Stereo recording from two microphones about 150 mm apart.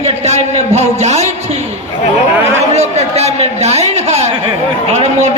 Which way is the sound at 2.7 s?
45° right (ahead or behind).